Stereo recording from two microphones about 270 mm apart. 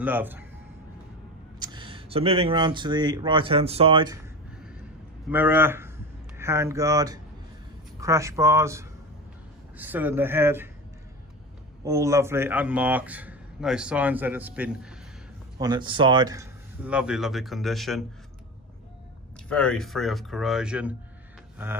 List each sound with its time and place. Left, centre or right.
0.0 s speech: centre
1.6 s speech: centre
5.3 s a man's voice: centre
11.8 s a man's voice: centre
15.6 s a man's voice: centre
19.5 s a man's voice: centre